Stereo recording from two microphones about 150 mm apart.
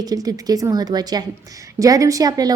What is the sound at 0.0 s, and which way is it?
A woman's voice, 25° right (ahead or behind).